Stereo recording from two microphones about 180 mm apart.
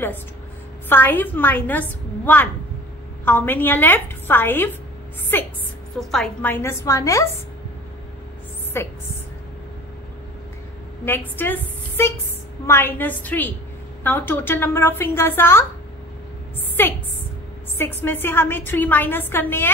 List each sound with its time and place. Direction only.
0.8 s a woman's voice: 10° left (ahead or behind)
8.7 s a woman's voice: 15° left (ahead or behind)
11.1 s a woman's voice: 10° left (ahead or behind)
16.8 s a woman's voice: 10° left (ahead or behind)